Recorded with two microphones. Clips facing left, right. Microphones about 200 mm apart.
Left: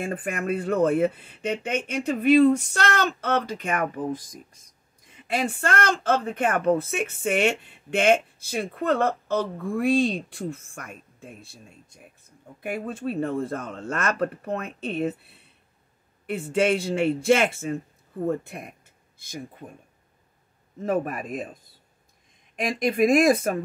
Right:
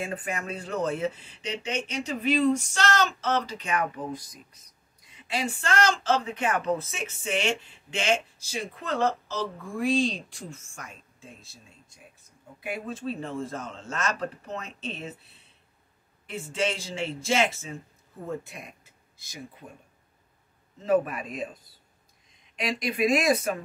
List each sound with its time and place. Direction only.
0.0 s a woman's voice: 55° left (ahead or behind)
5.3 s a woman's voice: 55° left (ahead or behind)
20.8 s speech: 50° left (ahead or behind)
22.6 s speech: 50° left (ahead or behind)